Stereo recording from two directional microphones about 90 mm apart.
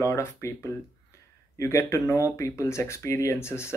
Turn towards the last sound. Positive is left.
turn(degrees=30)  # may be behind; listen again after turning